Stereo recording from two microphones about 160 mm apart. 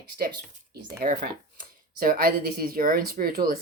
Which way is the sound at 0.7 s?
60° right (ahead or behind).